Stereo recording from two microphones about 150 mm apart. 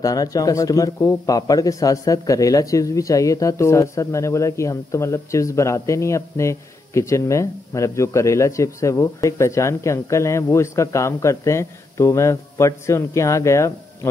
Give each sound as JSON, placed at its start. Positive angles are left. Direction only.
{"t": 0.0, "sound": "speech", "side_deg": 25}